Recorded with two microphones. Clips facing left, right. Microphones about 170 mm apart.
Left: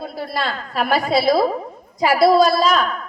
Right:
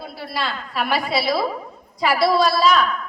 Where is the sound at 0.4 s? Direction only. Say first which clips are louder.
Left 2 dB; 45° left (ahead or behind).